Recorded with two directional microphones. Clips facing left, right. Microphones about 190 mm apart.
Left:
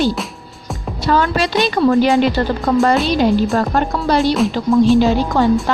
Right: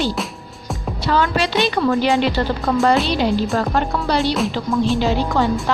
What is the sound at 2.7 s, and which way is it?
A woman's voice, 45° left (ahead or behind).